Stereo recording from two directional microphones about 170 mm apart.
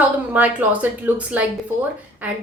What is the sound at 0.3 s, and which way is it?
Speech, 10° right (ahead or behind).